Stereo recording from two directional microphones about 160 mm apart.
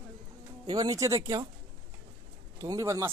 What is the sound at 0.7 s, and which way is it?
Speech, 25° right (ahead or behind).